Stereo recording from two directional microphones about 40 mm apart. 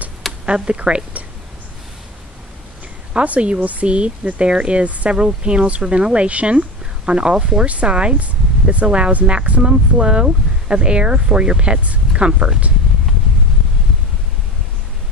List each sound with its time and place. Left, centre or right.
0.5 s speech: right
3.3 s speech: right